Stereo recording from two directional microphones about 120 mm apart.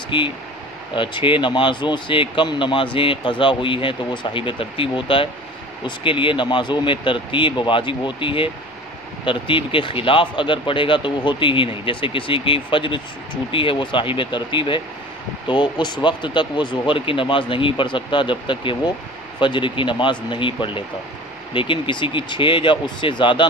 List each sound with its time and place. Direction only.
0.1 s speech: 45° left (ahead or behind)